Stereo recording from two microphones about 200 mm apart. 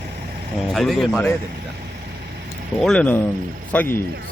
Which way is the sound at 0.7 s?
Centre (ahead or behind).